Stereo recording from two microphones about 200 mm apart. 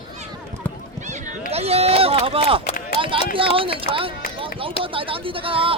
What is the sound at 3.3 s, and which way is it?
Speech, 25° right (ahead or behind).